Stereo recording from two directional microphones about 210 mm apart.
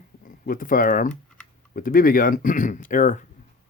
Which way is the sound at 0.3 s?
40° left (ahead or behind).